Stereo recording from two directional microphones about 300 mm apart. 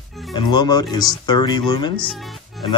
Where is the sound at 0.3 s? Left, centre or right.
Centre.